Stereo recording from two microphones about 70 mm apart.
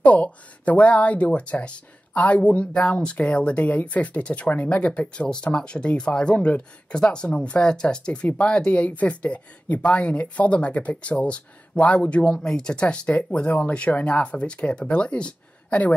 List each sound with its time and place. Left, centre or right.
0.0 s speech: centre